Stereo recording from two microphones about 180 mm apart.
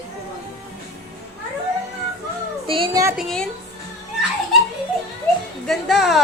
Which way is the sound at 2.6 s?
30° right (ahead or behind).